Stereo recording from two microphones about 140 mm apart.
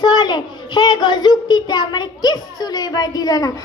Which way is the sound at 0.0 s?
30° left (ahead or behind).